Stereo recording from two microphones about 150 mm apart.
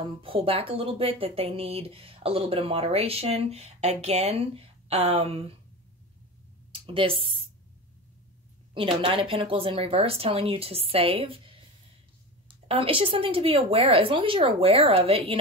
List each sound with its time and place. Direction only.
0.0 s speech: 35° right (ahead or behind)
6.7 s speech: 40° right (ahead or behind)
8.7 s speech: 35° right (ahead or behind)